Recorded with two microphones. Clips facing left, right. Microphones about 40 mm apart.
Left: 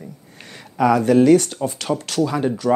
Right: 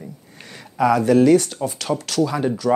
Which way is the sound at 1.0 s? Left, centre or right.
Left.